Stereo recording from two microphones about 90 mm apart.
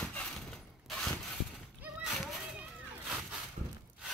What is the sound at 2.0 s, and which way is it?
Children playing, 5° right (ahead or behind).